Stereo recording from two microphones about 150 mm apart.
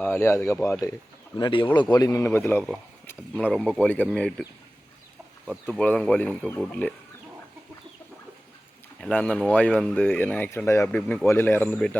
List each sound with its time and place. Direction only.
0.0 s speech: 15° left (ahead or behind)
1.4 s speech: 30° left (ahead or behind); by 2.6 s 15° left (ahead or behind)
3.4 s speech: 5° left (ahead or behind)
5.5 s speech: centre (ahead or behind)
9.0 s speech: 5° left (ahead or behind)
10.8 s speech: 5° left (ahead or behind)